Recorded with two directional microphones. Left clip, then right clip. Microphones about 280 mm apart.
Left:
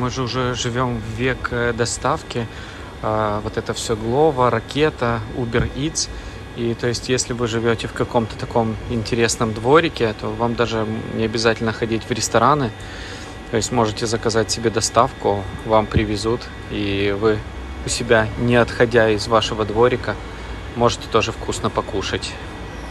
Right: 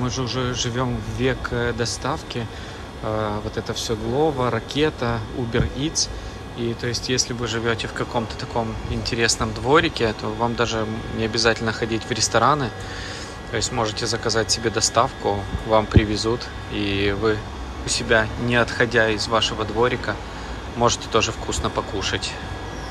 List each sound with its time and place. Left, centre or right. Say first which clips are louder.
0.0 s speech: left 3 dB; centre